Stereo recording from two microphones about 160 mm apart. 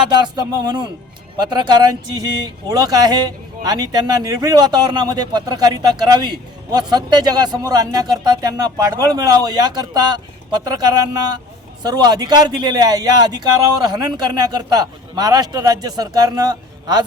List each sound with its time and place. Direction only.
0.1 s a man's voice: 25° right (ahead or behind)